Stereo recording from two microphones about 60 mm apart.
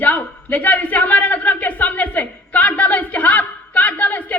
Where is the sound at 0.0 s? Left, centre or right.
Left.